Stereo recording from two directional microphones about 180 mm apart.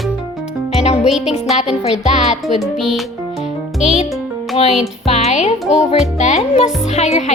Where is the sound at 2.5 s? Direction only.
Centre (ahead or behind).